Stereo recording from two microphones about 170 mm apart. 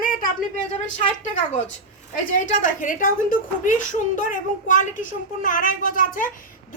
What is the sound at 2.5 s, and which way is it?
A woman's voice, 50° left (ahead or behind).